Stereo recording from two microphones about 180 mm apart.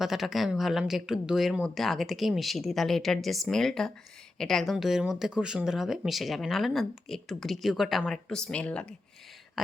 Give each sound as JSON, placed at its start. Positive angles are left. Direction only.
{"t": 0.0, "sound": "speech", "side_deg": 0}